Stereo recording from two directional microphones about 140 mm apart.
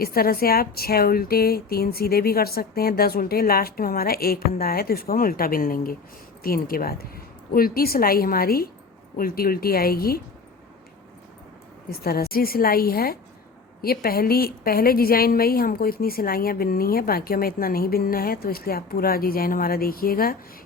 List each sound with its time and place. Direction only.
0.0 s a woman's voice: 90° left
11.9 s a woman's voice: 90° left